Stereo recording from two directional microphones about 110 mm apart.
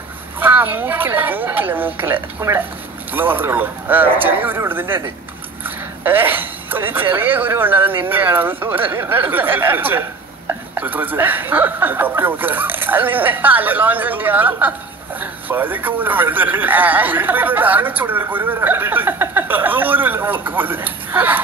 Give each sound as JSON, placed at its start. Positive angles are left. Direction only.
{"t": 0.4, "sound": "a woman's voice", "side_deg": -15}
{"t": 6.0, "sound": "a woman's voice", "side_deg": -20}